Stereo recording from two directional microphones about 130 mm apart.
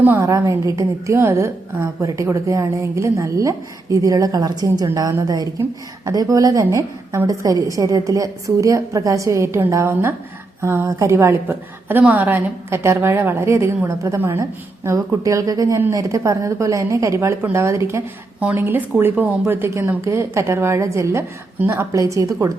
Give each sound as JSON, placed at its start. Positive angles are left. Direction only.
{"t": 0.0, "sound": "a woman's voice", "side_deg": -15}